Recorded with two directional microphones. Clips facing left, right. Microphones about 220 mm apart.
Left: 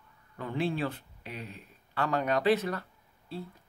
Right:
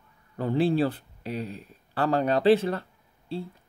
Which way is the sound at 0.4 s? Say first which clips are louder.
Right 8 dB; 35° right (ahead or behind).